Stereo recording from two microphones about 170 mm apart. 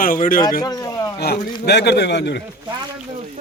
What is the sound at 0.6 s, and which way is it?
Speech, 20° left (ahead or behind).